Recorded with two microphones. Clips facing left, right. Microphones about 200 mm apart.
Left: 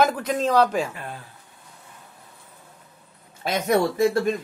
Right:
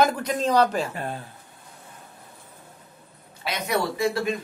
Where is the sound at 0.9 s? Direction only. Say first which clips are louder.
Right 5 dB; 35° right (ahead or behind).